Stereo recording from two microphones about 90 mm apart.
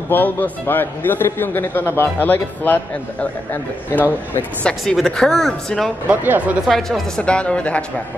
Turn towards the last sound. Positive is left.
turn(degrees=10)  # may be behind; listen again after turning